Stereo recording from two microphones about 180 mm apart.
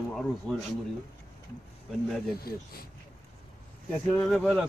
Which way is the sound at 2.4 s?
55° left (ahead or behind).